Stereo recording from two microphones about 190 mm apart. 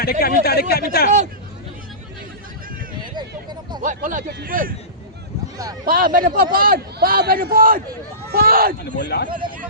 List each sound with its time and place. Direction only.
0.0 s speech: 55° left (ahead or behind)
3.2 s a sound: 20° right (ahead or behind)
3.8 s a man's voice: 45° right (ahead or behind)
5.8 s a man's voice: 50° right (ahead or behind)
8.8 s a man's voice: 60° left (ahead or behind)